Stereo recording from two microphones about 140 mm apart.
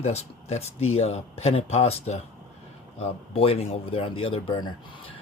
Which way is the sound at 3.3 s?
45° left (ahead or behind).